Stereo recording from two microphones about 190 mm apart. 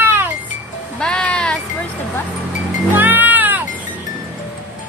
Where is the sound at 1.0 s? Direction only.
5° left (ahead or behind).